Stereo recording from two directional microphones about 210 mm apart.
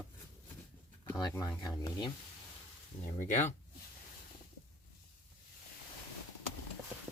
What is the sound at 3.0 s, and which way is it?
Speech, 35° left (ahead or behind).